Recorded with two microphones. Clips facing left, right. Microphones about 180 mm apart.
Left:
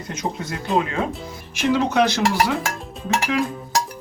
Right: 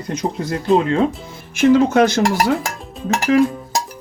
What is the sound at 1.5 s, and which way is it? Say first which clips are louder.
Speech: right 7 dB; 50° right (ahead or behind).